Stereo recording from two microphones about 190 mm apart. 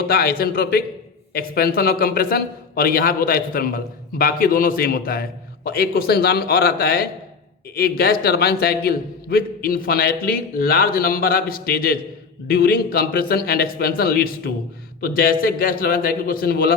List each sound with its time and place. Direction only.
0.0 s a man's voice: 55° left (ahead or behind)